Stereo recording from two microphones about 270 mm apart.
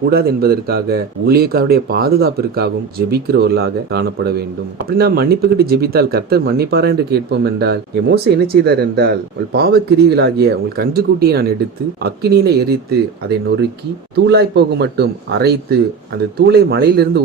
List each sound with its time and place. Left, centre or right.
0.1 s speech: right
14.3 s speech: right